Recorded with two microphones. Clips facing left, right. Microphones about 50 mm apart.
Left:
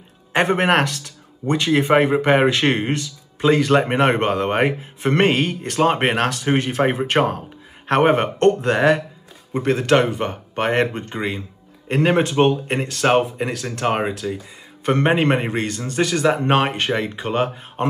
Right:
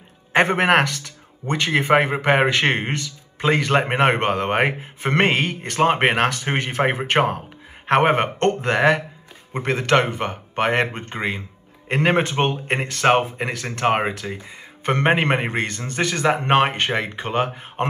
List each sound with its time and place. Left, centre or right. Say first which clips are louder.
0.3 s speech: right 1 dB; right